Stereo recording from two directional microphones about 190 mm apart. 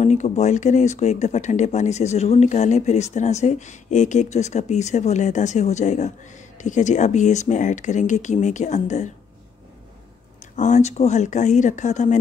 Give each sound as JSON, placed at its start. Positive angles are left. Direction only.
{"t": 0.0, "sound": "speech", "side_deg": 35}
{"t": 10.5, "sound": "speech", "side_deg": 40}